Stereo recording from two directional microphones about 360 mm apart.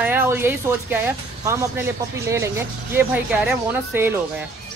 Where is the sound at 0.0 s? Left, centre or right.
Centre.